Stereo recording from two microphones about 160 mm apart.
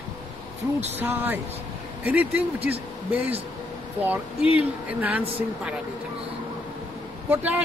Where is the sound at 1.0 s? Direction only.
10° right (ahead or behind).